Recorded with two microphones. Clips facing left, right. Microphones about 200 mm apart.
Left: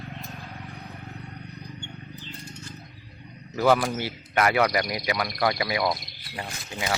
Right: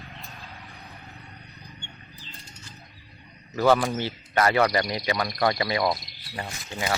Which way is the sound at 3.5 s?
10° left (ahead or behind).